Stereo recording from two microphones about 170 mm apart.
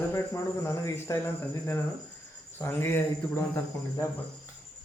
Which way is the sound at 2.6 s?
15° left (ahead or behind).